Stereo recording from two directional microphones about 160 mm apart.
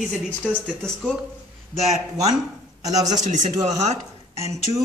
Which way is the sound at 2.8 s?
20° right (ahead or behind).